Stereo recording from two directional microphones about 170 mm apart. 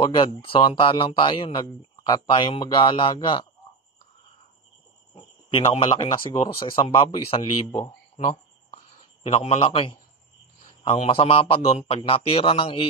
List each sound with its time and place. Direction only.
0.0 s speech: 30° left (ahead or behind)
5.8 s a man's voice: 30° left (ahead or behind)
8.2 s a sound: 40° left (ahead or behind)
10.8 s a man's voice: 35° left (ahead or behind)